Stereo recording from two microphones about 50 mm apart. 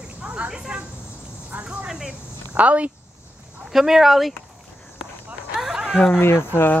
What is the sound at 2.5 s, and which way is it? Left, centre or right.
Speech, right.